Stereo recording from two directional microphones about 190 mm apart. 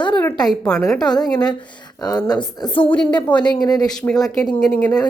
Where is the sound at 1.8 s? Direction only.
20° left (ahead or behind).